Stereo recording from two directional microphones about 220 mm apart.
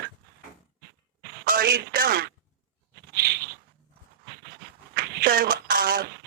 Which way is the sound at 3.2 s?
45° right (ahead or behind).